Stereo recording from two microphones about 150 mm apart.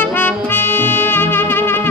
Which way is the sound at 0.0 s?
15° left (ahead or behind).